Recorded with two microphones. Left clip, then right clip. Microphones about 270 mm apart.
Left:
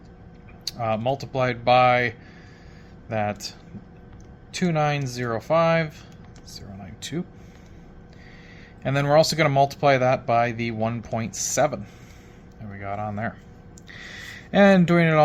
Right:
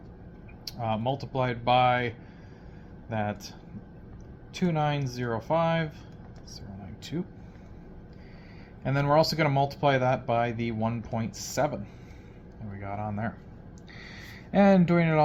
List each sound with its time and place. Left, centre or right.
0.6 s speech: left
4.6 s speech: left
8.8 s speech: left
12.8 s speech: left
13.9 s a sound: left